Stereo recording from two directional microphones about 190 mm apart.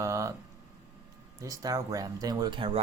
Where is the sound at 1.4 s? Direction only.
20° right (ahead or behind).